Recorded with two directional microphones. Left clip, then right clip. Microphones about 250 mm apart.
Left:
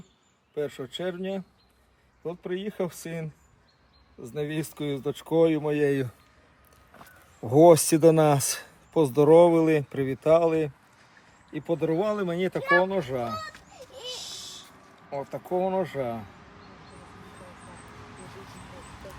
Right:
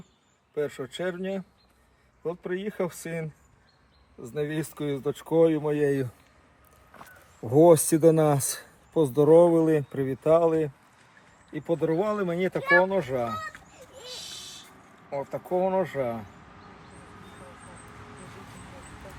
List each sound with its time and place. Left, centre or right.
0.5 s speech: centre
14.1 s a sound: left
15.1 s speech: centre